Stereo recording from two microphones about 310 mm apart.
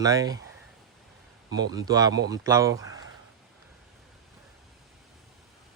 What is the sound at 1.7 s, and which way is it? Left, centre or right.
Speech, centre.